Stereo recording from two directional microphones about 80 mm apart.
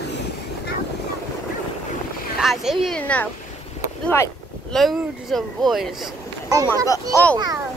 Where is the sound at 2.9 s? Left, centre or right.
Centre.